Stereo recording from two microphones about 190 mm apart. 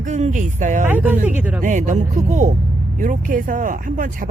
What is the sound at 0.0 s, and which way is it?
Speech, 40° right (ahead or behind).